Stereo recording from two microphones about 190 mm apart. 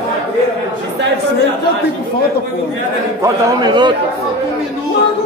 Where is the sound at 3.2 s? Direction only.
25° right (ahead or behind).